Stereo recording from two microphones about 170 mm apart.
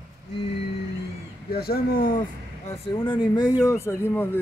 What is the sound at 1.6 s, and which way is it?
Speech, 60° left (ahead or behind).